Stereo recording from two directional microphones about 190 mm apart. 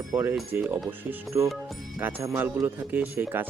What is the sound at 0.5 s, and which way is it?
Speech, 10° right (ahead or behind).